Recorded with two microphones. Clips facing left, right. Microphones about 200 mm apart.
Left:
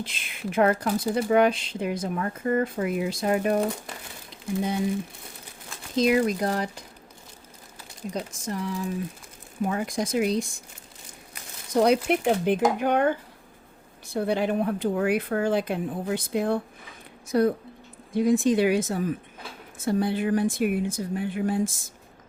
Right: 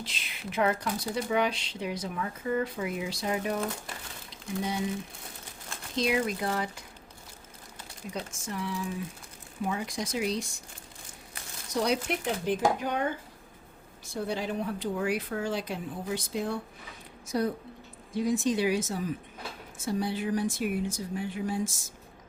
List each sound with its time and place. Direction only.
0.0 s speech: 50° left (ahead or behind)
6.0 s speech: 45° left (ahead or behind)
8.1 s speech: 40° left (ahead or behind)
11.7 s speech: 55° left (ahead or behind)